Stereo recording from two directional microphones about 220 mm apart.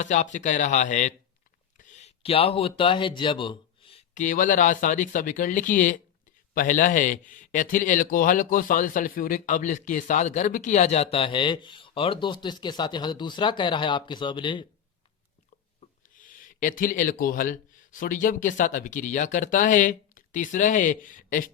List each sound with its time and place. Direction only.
0.0 s a man's voice: 35° left (ahead or behind)
16.0 s speech: 35° left (ahead or behind)